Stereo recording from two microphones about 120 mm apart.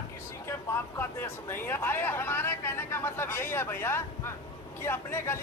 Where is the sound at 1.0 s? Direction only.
15° left (ahead or behind).